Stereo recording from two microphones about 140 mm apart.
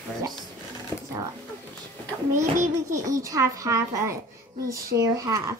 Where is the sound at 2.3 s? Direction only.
20° right (ahead or behind).